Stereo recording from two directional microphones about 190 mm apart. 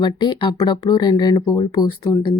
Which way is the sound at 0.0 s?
25° left (ahead or behind).